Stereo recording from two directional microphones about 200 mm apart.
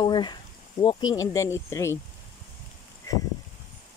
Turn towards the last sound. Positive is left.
turn(degrees=15)  # may be behind; listen again after turning